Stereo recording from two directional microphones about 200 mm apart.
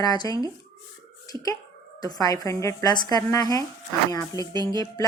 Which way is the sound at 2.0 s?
20° left (ahead or behind).